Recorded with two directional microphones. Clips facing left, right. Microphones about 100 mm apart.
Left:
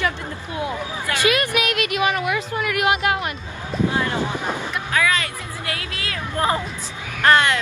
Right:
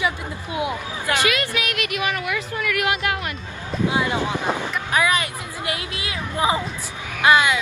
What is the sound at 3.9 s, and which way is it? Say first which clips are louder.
A woman's voice: right 1 dB; 15° right (ahead or behind).